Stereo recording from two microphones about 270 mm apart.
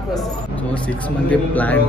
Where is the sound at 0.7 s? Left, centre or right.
Centre.